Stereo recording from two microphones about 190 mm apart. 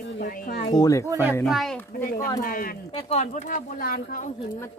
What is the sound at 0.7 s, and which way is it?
Speech, 20° left (ahead or behind).